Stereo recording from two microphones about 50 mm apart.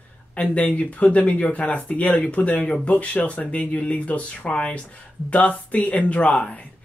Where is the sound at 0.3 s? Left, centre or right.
Left.